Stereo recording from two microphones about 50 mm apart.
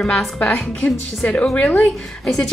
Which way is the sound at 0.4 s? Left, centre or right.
Left.